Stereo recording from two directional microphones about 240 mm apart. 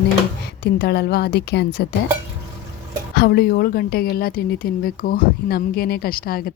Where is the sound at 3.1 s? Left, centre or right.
Left.